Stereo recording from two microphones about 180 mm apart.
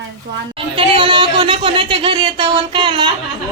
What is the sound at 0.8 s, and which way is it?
Speech, 30° right (ahead or behind).